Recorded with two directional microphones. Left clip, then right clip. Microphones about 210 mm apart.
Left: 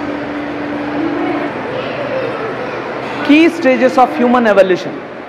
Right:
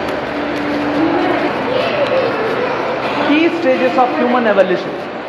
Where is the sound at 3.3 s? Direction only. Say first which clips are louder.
Left 5 dB; 65° left (ahead or behind).